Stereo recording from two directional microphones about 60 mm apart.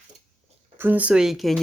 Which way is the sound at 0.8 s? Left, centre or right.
Right.